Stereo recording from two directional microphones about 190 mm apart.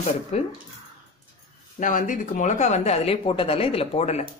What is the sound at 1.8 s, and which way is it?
Speech, 45° left (ahead or behind).